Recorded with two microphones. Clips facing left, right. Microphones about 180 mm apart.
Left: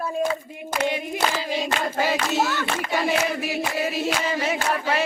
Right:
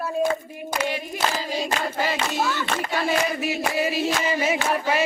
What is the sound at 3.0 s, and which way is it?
Chant, centre (ahead or behind).